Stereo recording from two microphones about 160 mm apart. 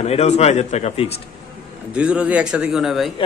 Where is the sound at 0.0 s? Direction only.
40° left (ahead or behind).